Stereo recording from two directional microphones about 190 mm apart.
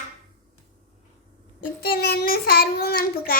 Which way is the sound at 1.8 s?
55° left (ahead or behind).